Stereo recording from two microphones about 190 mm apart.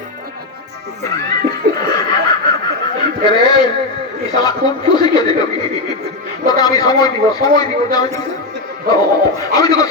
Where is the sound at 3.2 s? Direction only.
25° left (ahead or behind).